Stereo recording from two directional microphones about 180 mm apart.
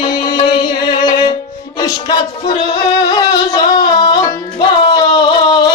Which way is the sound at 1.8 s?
20° left (ahead or behind).